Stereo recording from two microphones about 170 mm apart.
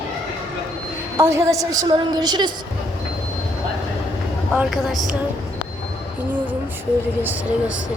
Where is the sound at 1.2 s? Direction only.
15° right (ahead or behind).